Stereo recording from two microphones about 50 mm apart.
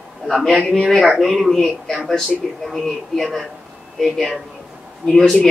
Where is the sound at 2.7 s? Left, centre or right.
Centre.